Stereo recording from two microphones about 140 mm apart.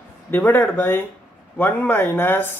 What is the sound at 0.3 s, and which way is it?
Speech, 15° left (ahead or behind).